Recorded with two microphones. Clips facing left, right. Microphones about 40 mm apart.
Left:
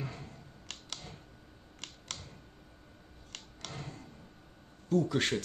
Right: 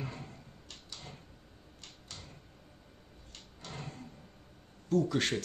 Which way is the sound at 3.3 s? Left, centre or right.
Left.